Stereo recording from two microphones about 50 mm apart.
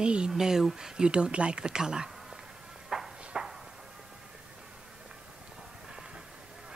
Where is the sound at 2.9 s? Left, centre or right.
Centre.